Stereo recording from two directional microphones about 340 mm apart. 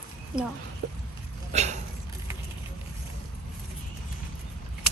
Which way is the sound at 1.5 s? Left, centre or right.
Centre.